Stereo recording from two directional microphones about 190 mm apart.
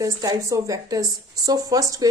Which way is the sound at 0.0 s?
20° right (ahead or behind).